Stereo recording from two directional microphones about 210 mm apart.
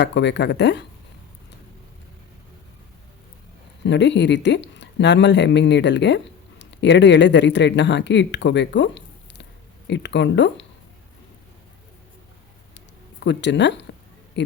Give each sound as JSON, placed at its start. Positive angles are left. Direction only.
{"t": 0.0, "sound": "speech", "side_deg": 55}
{"t": 3.8, "sound": "speech", "side_deg": 55}
{"t": 13.2, "sound": "speech", "side_deg": 55}